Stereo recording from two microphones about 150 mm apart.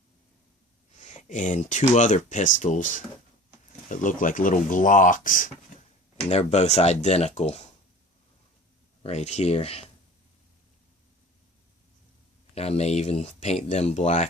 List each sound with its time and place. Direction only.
0.9 s speech: 50° left (ahead or behind)
6.2 s speech: 45° left (ahead or behind)
9.0 s speech: 45° left (ahead or behind)
12.5 s speech: 45° left (ahead or behind)